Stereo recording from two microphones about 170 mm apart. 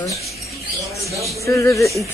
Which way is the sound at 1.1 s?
20° right (ahead or behind).